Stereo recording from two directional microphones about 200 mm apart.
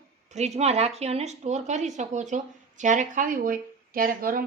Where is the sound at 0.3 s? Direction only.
35° right (ahead or behind).